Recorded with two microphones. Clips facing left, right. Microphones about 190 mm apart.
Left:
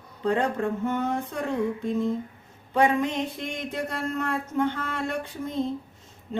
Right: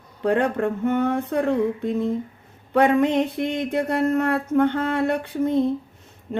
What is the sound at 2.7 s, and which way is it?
Speech, 60° right (ahead or behind).